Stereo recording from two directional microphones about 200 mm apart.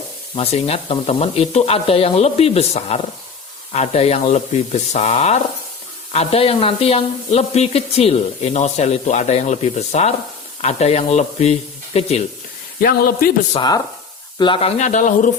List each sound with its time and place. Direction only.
0.3 s speech: 30° left (ahead or behind)
12.8 s speech: 50° left (ahead or behind)
13.5 s speech: 20° left (ahead or behind); by 15.3 s 40° left (ahead or behind)